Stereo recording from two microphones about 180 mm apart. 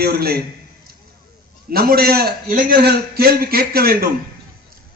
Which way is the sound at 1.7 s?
55° right (ahead or behind).